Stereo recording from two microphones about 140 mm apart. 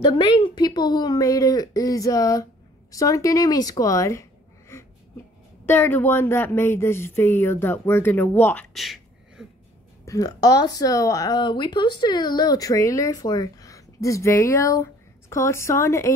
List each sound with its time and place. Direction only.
0.0 s speech: 35° left (ahead or behind); by 8.6 s 10° left (ahead or behind)
8.7 s a sound: centre (ahead or behind)
10.0 s speech: 25° left (ahead or behind)